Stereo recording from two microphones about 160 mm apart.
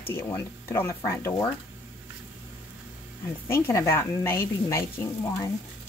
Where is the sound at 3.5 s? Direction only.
15° left (ahead or behind).